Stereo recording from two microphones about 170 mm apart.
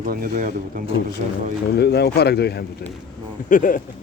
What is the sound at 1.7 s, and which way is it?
Speech, 75° left (ahead or behind).